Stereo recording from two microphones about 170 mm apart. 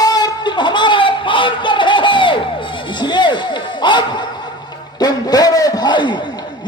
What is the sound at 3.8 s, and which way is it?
A man's voice, 25° left (ahead or behind).